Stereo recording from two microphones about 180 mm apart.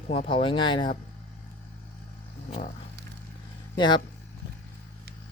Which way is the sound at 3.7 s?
25° left (ahead or behind).